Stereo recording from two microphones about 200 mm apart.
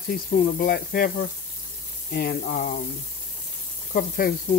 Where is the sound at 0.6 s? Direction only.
50° left (ahead or behind).